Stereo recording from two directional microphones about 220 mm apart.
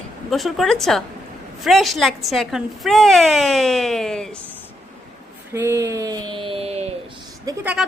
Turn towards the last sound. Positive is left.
turn(degrees=-5)  # may be behind; listen again after turning